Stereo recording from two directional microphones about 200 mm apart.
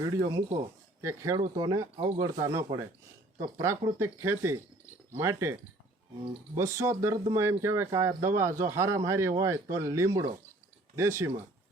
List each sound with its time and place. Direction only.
0.0 s speech: 20° right (ahead or behind)
6.6 s speech: 15° right (ahead or behind)